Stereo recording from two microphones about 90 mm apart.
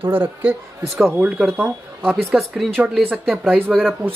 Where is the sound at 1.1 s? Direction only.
10° right (ahead or behind).